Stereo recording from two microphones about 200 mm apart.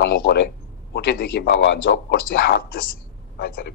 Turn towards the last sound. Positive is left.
turn(degrees=50)  # may be behind; listen again after turning